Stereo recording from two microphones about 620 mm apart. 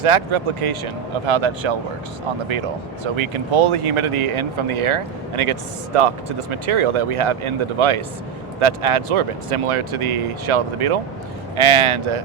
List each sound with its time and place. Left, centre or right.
0.0 s speech: right
3.0 s speech: right